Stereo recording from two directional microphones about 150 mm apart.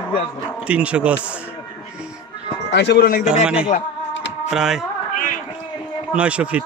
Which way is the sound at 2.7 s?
80° left.